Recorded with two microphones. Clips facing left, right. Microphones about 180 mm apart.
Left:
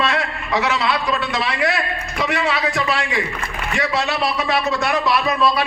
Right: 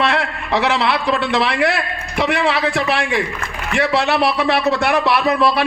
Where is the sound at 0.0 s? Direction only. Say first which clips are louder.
Right 3 dB; 65° right (ahead or behind).